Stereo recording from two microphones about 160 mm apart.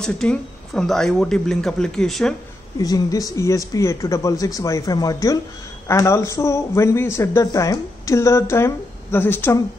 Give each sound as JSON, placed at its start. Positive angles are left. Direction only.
{"t": 0.0, "sound": "speech", "side_deg": 5}
{"t": 2.8, "sound": "speech", "side_deg": 20}